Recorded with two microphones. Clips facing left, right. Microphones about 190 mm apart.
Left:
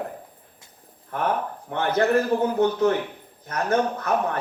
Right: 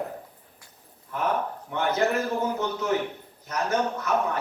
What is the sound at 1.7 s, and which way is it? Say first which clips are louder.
A man's voice: left 4 dB; 55° left (ahead or behind).